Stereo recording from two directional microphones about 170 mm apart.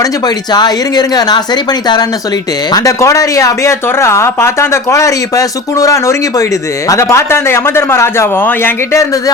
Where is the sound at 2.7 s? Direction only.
20° left (ahead or behind).